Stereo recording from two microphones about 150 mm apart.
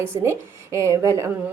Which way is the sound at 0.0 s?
20° right (ahead or behind).